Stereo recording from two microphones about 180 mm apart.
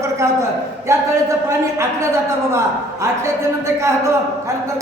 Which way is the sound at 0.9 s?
15° right (ahead or behind).